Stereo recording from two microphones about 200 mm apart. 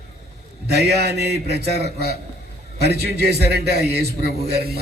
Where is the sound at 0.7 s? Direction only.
55° right (ahead or behind).